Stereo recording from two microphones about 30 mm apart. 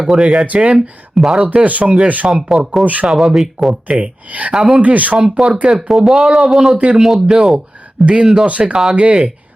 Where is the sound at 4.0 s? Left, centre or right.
Right.